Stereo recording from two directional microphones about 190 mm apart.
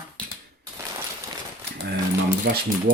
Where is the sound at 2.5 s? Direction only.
60° right (ahead or behind).